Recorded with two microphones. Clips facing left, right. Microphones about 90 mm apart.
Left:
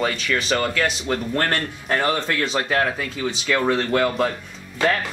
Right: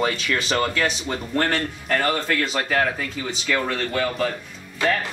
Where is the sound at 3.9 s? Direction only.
40° left (ahead or behind).